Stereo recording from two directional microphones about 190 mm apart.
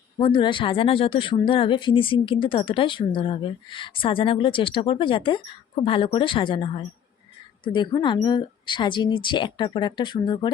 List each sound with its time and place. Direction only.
0.2 s speech: 25° left (ahead or behind)